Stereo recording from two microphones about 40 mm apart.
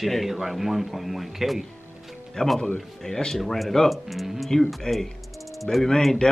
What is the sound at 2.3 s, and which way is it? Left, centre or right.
Speech, centre.